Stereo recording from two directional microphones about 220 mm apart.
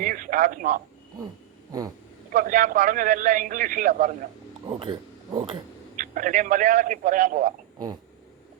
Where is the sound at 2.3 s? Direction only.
40° right (ahead or behind).